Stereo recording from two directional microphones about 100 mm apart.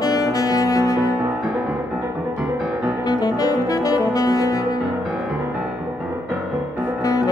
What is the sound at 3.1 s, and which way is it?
Saxophone, 40° left (ahead or behind).